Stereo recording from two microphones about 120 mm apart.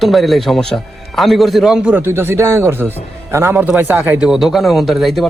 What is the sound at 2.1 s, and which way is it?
A man's voice, 20° right (ahead or behind).